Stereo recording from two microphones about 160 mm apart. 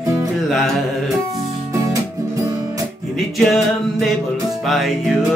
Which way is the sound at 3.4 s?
Centre (ahead or behind).